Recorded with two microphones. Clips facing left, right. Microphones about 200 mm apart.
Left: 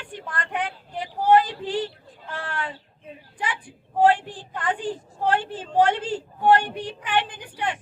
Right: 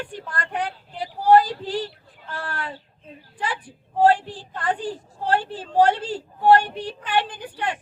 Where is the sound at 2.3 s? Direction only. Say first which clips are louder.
Even; 40° right (ahead or behind).